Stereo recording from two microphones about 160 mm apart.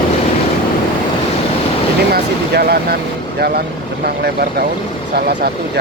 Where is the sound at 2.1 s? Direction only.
75° right (ahead or behind).